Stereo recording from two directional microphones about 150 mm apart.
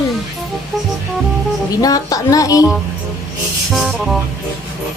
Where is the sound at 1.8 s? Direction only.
25° left (ahead or behind).